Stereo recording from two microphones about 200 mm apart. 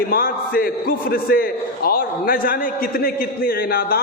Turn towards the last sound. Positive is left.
turn(degrees=45)  # may be behind; listen again after turning